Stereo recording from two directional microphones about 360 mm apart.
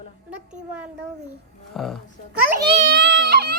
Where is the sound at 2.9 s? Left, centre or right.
Right.